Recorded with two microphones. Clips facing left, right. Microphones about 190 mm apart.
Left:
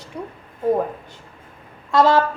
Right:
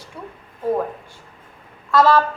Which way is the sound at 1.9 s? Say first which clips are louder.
Even; 20° left (ahead or behind).